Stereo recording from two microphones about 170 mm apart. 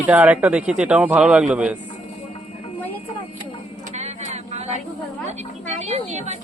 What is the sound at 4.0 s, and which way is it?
Vehicle, 40° right (ahead or behind).